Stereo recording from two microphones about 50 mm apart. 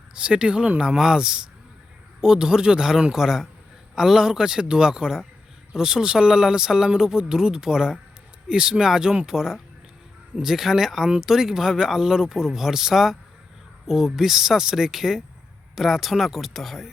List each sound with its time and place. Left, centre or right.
0.1 s speech: centre